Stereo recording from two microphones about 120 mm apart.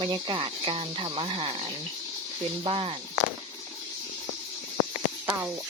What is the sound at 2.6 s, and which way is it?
Speech, 50° right (ahead or behind).